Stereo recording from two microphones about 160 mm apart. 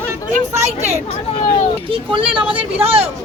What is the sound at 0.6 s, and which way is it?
Speech, 45° right (ahead or behind).